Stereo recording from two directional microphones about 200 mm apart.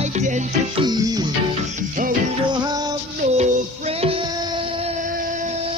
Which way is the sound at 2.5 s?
20° right (ahead or behind).